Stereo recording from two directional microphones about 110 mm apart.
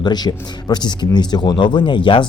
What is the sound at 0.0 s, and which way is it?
Speech, 40° left (ahead or behind).